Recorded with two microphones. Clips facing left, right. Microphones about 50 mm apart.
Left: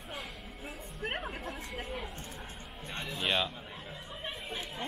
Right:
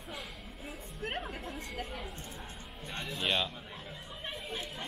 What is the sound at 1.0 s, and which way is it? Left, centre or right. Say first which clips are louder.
Chatter: left 1 dB; left.